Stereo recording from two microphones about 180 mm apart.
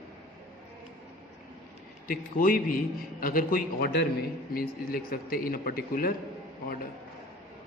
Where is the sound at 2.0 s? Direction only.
50° left (ahead or behind).